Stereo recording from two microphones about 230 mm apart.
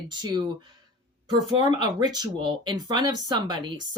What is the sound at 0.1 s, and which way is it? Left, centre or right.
Speech, centre.